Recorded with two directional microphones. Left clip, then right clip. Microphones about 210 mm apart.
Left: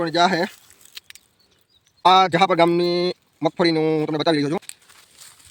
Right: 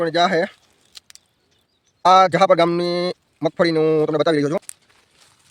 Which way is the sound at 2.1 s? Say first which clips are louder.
Right 2 dB; 35° right (ahead or behind).